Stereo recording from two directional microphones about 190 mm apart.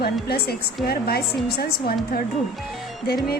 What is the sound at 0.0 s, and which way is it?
A woman's voice, 55° left (ahead or behind).